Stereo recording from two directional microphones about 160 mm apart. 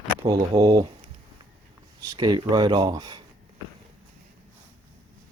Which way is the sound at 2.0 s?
25° right (ahead or behind).